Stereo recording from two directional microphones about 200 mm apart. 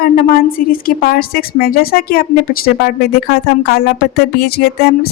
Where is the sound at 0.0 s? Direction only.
50° left (ahead or behind).